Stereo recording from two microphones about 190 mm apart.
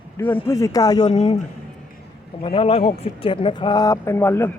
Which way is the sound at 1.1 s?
30° left (ahead or behind).